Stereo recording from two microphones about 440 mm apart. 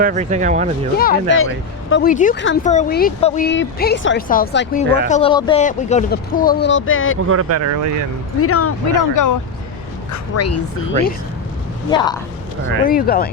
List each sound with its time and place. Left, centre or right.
0.0 s speech: centre
0.9 s speech: centre
7.3 s speech: right
8.4 s speech: left
8.9 s speech: left
11.9 s a woman's voice: centre